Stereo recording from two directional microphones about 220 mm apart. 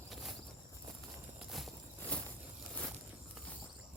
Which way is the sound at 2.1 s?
5° left (ahead or behind).